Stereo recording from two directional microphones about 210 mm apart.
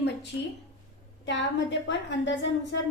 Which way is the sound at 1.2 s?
60° left (ahead or behind).